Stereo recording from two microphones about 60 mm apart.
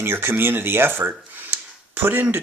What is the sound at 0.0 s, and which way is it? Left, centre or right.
Speech, right.